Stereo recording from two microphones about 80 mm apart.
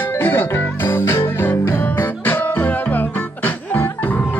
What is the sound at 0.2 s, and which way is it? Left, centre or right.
Music, left.